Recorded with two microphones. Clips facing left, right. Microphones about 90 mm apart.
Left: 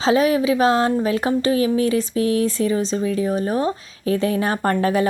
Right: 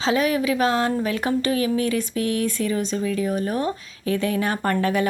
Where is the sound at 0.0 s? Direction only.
30° left (ahead or behind).